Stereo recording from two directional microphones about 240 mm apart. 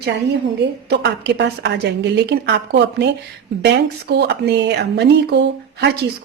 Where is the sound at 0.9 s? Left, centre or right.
Right.